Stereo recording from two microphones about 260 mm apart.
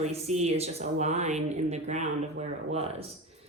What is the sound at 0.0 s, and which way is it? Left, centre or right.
Speech, right.